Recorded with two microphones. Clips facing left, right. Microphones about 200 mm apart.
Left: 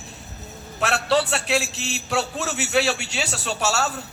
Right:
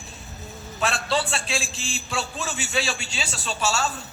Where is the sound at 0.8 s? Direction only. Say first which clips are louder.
Left 4 dB; 70° left (ahead or behind).